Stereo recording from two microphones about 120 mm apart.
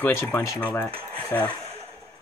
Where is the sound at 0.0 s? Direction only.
20° left (ahead or behind).